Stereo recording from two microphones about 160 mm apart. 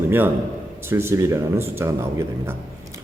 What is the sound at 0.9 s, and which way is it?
A man's voice, 15° right (ahead or behind).